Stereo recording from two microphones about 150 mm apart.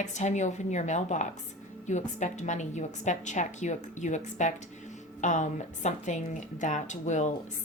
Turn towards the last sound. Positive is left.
turn(degrees=50)  # may be behind; listen again after turning